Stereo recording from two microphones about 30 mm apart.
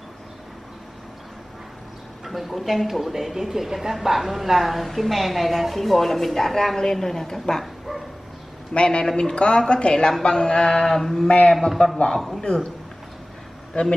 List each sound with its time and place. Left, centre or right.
2.2 s a woman's voice: centre
8.7 s speech: left
10.2 s mantra: left
10.9 s a woman's voice: centre
11.2 s speech: left
12.2 s a woman's voice: centre
13.7 s speech: left